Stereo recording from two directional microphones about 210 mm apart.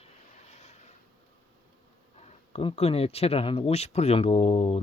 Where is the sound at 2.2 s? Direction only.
30° left (ahead or behind).